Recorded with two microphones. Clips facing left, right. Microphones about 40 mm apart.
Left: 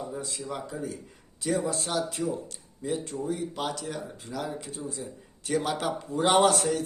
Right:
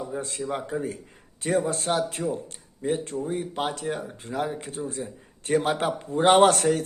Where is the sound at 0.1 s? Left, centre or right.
Right.